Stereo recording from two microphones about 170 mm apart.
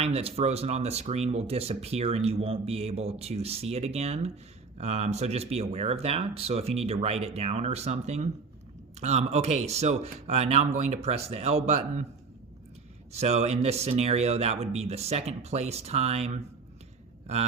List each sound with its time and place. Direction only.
0.0 s speech: 35° right (ahead or behind)
13.1 s speech: 40° right (ahead or behind)